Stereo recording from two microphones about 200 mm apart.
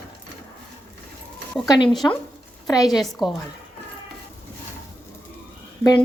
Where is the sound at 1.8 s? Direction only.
Centre (ahead or behind).